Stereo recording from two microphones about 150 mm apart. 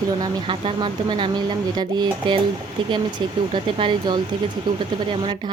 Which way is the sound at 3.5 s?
35° right (ahead or behind).